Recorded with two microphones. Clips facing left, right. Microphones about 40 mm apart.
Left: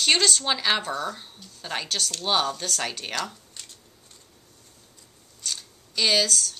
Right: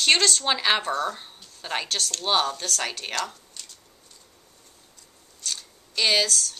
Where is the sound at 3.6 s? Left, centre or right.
Left.